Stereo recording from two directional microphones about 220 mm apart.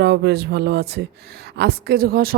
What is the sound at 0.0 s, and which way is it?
Speech, 45° right (ahead or behind).